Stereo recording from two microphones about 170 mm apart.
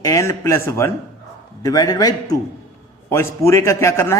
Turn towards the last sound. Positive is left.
turn(degrees=15)  # may be behind; listen again after turning